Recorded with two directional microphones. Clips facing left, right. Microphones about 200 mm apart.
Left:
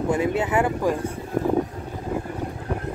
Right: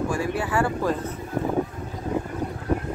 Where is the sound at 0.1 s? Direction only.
20° left (ahead or behind).